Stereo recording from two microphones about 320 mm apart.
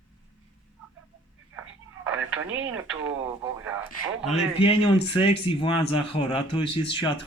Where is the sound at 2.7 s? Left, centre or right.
Centre.